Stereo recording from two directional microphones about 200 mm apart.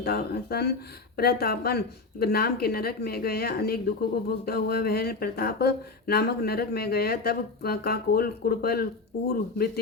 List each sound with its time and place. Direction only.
0.0 s speech: 50° left (ahead or behind)